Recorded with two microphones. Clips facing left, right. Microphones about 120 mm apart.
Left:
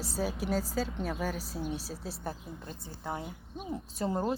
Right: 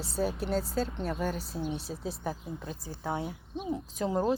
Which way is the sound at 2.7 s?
90° right.